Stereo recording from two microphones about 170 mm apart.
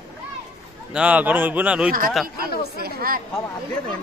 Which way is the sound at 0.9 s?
5° right (ahead or behind).